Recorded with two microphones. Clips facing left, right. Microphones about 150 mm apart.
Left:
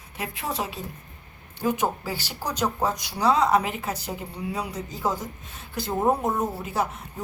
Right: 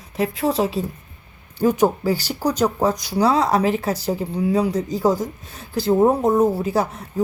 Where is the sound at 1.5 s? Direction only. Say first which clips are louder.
Right 8 dB; 40° right (ahead or behind).